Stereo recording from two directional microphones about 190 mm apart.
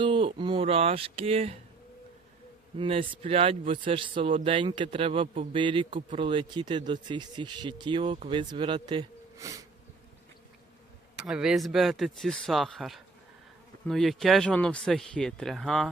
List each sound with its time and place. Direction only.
0.0 s speech: 25° right (ahead or behind)
2.7 s a man's voice: 25° right (ahead or behind)
11.2 s speech: 5° right (ahead or behind)